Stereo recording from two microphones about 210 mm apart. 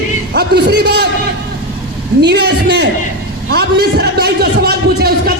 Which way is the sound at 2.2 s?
50° right (ahead or behind).